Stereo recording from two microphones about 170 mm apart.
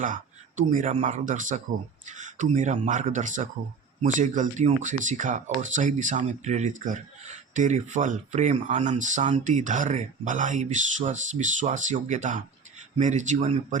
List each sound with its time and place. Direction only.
0.0 s a man's voice: 50° right (ahead or behind)